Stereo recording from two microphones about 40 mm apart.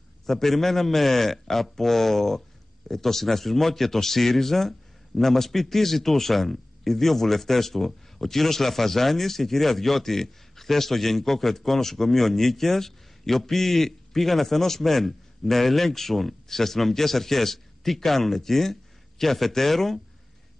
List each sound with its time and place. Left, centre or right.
0.3 s speech: centre